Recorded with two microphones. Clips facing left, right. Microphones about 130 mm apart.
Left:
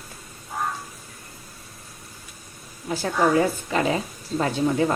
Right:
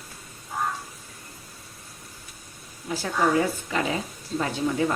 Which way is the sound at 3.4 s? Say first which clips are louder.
Left 3 dB; 40° left (ahead or behind).